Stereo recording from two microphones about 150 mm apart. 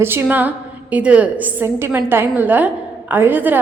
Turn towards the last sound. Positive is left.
turn(degrees=-10)  # may be behind; listen again after turning